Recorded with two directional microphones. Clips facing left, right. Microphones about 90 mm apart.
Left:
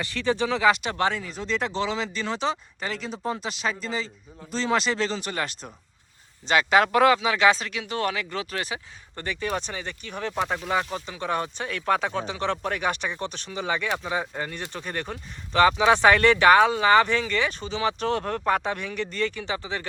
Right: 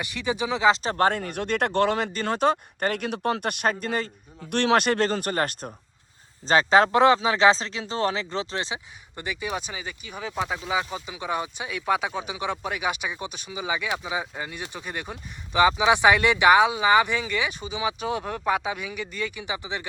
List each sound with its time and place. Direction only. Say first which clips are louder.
0.0 s speech: left 2 dB; 15° right (ahead or behind)
0.7 s speech: right 2 dB; 35° right (ahead or behind)
6.4 s speech: right 2 dB; 35° right (ahead or behind); by 19.8 s 15° right (ahead or behind)